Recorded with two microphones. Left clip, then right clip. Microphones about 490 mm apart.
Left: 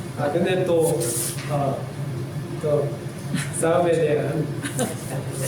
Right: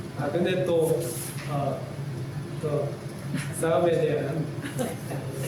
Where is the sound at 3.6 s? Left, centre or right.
Right.